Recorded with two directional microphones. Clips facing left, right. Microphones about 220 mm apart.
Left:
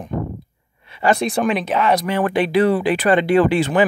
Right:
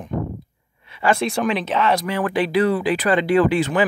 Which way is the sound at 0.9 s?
40° left (ahead or behind).